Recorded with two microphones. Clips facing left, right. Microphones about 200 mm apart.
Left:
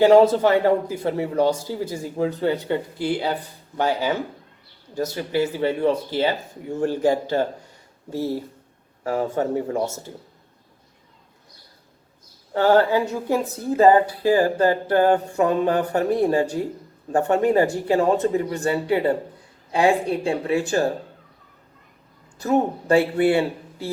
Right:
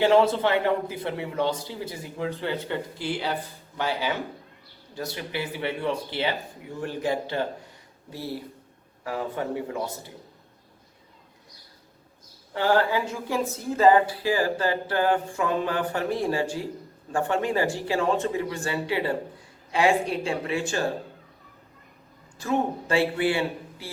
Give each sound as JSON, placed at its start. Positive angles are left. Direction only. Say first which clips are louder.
{"t": 0.0, "sound": "speech", "louder": "left 6 dB", "side_deg": 40}
{"t": 9.0, "sound": "speech", "louder": "left 7 dB", "side_deg": 45}
{"t": 12.5, "sound": "speech", "louder": "left 6 dB", "side_deg": 40}
{"t": 22.4, "sound": "speech", "louder": "left 5 dB", "side_deg": 40}